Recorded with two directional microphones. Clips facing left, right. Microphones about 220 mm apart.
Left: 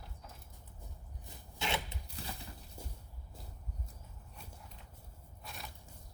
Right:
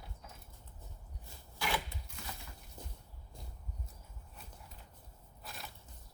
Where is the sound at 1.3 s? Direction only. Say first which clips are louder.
Even; 25° left (ahead or behind).